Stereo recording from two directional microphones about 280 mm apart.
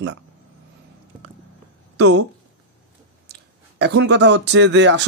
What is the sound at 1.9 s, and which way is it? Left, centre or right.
Speech, right.